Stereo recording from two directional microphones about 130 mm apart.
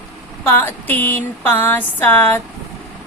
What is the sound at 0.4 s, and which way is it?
A woman's voice, 15° left (ahead or behind).